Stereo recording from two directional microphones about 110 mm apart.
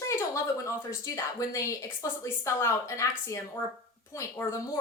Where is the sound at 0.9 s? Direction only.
30° left (ahead or behind).